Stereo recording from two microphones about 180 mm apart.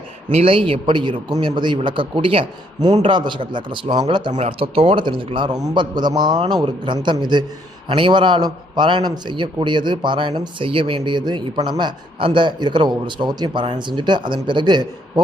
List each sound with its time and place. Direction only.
0.3 s a man's voice: 30° right (ahead or behind)